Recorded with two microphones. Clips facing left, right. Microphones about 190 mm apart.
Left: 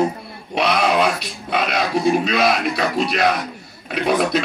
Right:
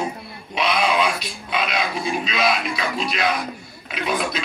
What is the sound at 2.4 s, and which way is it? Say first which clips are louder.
Speech: left 4 dB; 45° left (ahead or behind).